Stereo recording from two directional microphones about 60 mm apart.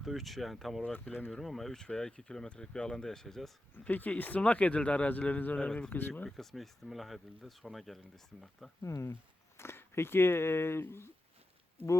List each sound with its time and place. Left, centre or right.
0.0 s speech: centre
3.8 s a man's voice: left
5.9 s speech: left
6.2 s speech: centre
8.8 s speech: left
9.6 s speech: left